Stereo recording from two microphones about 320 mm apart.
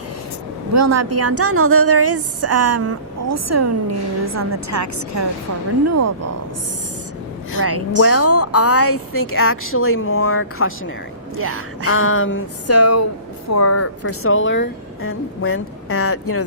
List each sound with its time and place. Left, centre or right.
0.7 s a woman's voice: right
7.9 s a woman's voice: left
11.3 s speech: right
11.9 s a woman's voice: left